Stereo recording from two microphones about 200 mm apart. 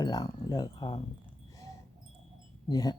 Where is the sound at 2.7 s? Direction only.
20° left (ahead or behind).